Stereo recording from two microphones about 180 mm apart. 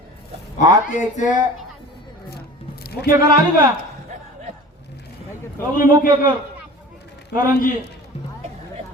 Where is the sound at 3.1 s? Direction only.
20° right (ahead or behind).